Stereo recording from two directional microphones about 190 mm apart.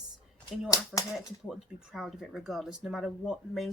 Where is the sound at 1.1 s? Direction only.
Centre (ahead or behind).